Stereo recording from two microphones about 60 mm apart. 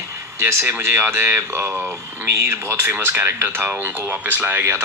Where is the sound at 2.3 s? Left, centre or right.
Right.